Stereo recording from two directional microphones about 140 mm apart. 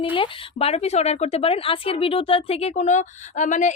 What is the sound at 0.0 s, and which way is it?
Speech, 40° left (ahead or behind).